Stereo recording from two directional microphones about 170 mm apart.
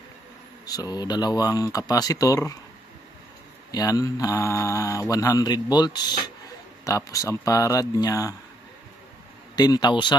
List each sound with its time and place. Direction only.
0.6 s mantra: 20° left (ahead or behind)
3.7 s mantra: 20° left (ahead or behind)
9.6 s mantra: 25° left (ahead or behind)